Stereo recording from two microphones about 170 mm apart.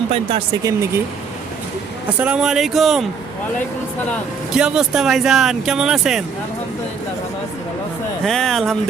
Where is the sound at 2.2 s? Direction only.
5° right (ahead or behind).